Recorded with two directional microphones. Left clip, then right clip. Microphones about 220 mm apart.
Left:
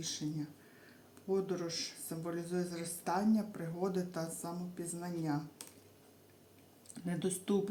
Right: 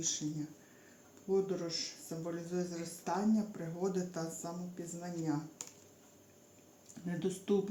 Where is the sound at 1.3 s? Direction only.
20° left (ahead or behind).